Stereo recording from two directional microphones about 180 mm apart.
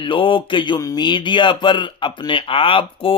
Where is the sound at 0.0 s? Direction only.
30° left (ahead or behind).